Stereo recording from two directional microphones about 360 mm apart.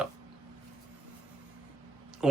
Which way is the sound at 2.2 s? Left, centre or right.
Centre.